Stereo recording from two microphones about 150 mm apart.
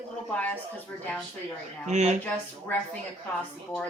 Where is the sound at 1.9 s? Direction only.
50° right (ahead or behind).